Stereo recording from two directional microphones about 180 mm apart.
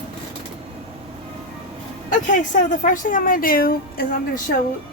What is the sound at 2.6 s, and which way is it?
A woman's voice, 45° left (ahead or behind).